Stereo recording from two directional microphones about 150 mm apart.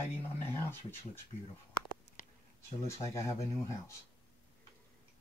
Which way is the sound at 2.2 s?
55° left (ahead or behind).